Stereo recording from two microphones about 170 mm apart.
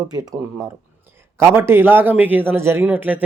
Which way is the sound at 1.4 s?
15° right (ahead or behind).